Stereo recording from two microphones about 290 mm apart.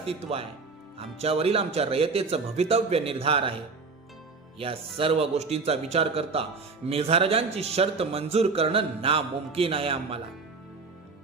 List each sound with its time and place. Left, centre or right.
0.0 s a man's voice: centre
4.5 s a man's voice: centre